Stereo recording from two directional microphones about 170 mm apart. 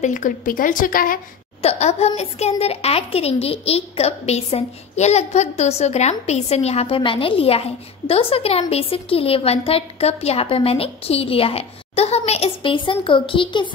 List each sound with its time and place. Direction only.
0.0 s a woman's voice: 50° left (ahead or behind)
1.6 s a child's voice: 40° left (ahead or behind)